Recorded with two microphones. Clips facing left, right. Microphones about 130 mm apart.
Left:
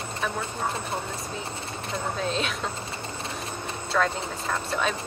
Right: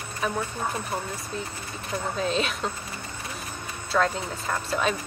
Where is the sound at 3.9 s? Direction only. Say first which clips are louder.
Right 1 dB; centre (ahead or behind).